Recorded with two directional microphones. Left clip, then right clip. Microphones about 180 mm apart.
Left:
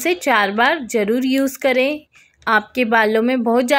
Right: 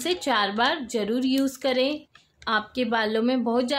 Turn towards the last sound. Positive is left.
turn(degrees=30)  # may be behind; listen again after turning